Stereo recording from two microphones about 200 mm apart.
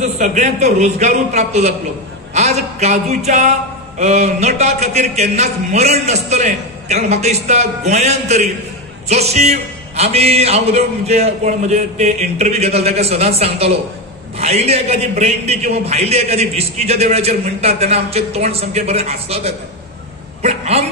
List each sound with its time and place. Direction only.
0.0 s a man's voice: 35° right (ahead or behind)